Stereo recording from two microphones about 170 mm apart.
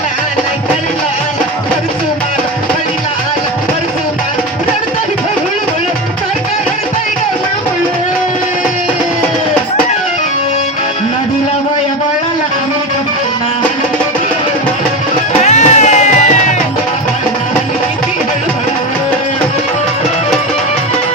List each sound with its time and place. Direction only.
15.4 s music: 40° left (ahead or behind)